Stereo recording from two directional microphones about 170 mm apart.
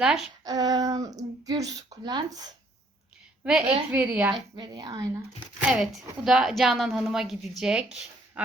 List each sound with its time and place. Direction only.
0.0 s a woman's voice: 5° right (ahead or behind)
0.4 s speech: 20° right (ahead or behind)
3.4 s a woman's voice: 5° right (ahead or behind)
4.5 s speech: 25° right (ahead or behind)
5.6 s a woman's voice: 5° right (ahead or behind)